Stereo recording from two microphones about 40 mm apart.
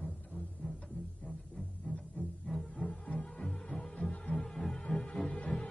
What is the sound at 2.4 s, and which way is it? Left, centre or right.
Music, centre.